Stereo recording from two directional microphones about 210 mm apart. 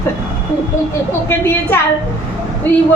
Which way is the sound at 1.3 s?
10° left (ahead or behind).